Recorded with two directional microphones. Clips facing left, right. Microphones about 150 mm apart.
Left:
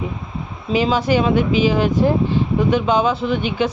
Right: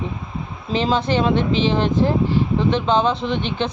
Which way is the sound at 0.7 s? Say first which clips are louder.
Left 3 dB; 10° left (ahead or behind).